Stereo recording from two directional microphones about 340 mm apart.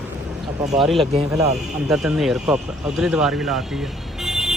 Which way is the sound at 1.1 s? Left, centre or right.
Centre.